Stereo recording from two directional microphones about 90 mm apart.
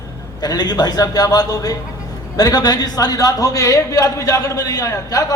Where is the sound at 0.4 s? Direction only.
50° left (ahead or behind).